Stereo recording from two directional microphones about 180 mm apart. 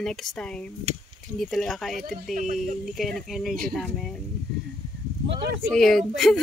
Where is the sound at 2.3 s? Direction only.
45° right (ahead or behind).